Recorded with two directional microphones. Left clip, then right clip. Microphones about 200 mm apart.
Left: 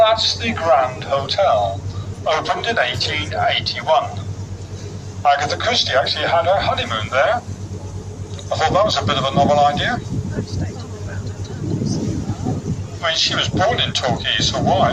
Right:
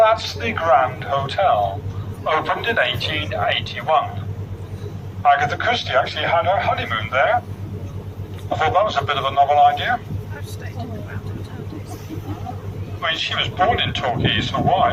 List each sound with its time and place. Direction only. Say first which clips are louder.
0.0 s a man's voice: left 2 dB; 35° left (ahead or behind); by 3.3 s 5° left (ahead or behind)
3.4 s a man's voice: left 4 dB; 20° left (ahead or behind)
5.2 s a man's voice: even; 35° left (ahead or behind)
8.4 s a man's voice: left 2 dB; 40° left (ahead or behind)
13.0 s a man's voice: left 3 dB; 30° left (ahead or behind)